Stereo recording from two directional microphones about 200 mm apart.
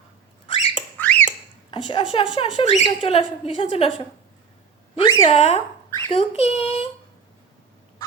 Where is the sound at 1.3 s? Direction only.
25° left (ahead or behind).